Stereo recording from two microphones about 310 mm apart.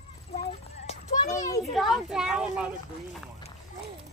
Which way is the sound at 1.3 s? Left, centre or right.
Centre.